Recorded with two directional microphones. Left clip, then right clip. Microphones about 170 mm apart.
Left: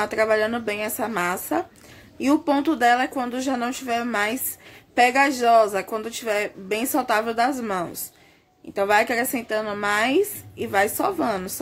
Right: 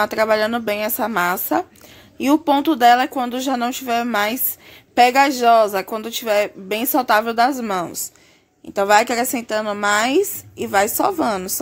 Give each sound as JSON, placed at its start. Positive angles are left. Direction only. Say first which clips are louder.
{"t": 0.0, "sound": "speech", "louder": "right 4 dB", "side_deg": -30}